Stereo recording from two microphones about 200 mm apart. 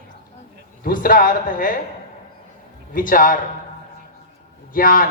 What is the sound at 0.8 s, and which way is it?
Speech, 45° left (ahead or behind).